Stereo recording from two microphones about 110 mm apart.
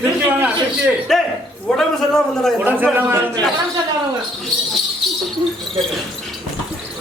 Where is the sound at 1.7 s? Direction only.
5° left (ahead or behind).